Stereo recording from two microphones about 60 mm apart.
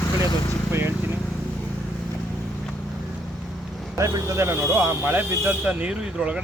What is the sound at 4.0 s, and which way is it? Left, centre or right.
A man's voice, right.